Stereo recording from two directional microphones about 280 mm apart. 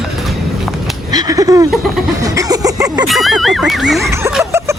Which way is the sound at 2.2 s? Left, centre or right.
Centre.